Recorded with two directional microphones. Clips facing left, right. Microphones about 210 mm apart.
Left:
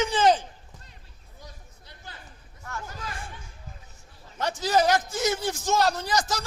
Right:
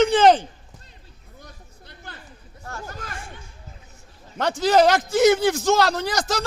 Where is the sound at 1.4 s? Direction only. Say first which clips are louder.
Right 1 dB; 60° right (ahead or behind).